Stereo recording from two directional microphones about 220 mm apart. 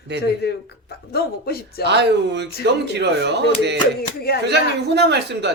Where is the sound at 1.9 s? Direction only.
50° right (ahead or behind).